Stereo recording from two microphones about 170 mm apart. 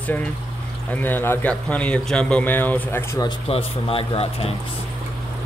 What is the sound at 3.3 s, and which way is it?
Speech, 35° left (ahead or behind).